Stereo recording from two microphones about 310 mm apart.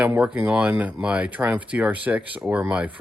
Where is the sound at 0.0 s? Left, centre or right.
Centre.